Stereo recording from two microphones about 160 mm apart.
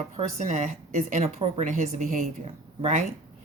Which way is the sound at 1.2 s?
40° right (ahead or behind).